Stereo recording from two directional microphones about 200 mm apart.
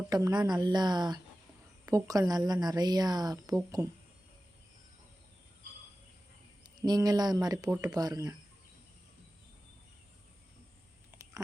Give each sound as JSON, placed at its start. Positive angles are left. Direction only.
{"t": 0.1, "sound": "a woman's voice", "side_deg": -20}
{"t": 6.8, "sound": "speech", "side_deg": -20}
{"t": 11.1, "sound": "a sound", "side_deg": -15}